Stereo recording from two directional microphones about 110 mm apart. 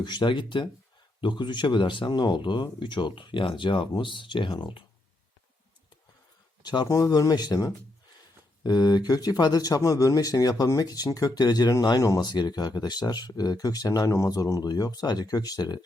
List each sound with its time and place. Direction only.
0.0 s speech: 40° left (ahead or behind)
6.6 s speech: 40° left (ahead or behind)